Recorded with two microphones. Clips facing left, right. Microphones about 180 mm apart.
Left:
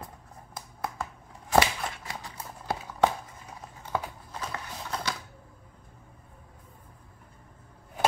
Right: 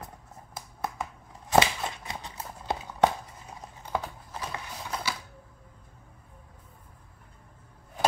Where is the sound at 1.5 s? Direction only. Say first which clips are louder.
Right 1 dB; 20° right (ahead or behind).